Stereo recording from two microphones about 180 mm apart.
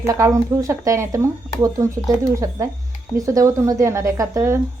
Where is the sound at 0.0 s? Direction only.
15° right (ahead or behind).